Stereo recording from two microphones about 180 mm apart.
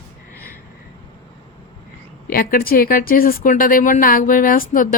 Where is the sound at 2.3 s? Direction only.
55° left (ahead or behind).